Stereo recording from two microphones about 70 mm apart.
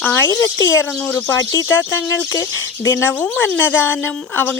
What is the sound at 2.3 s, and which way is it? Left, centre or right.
Speech, left.